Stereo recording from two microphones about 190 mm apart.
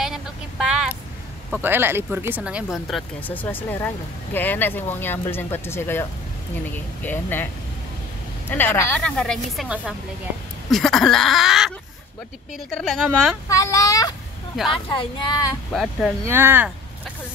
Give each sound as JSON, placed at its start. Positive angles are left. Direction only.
{"t": 0.0, "sound": "vehicle", "side_deg": 0}
{"t": 1.5, "sound": "speech", "side_deg": -10}
{"t": 8.5, "sound": "a woman's voice", "side_deg": 10}
{"t": 12.7, "sound": "a woman's voice", "side_deg": 0}
{"t": 13.5, "sound": "speech", "side_deg": 15}
{"t": 15.7, "sound": "a woman's voice", "side_deg": 0}
{"t": 16.3, "sound": "speech", "side_deg": -10}